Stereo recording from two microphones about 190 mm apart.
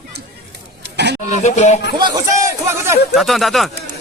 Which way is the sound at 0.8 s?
60° right (ahead or behind).